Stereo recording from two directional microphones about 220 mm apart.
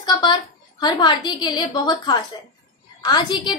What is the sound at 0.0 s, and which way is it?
A woman's voice, 20° left (ahead or behind).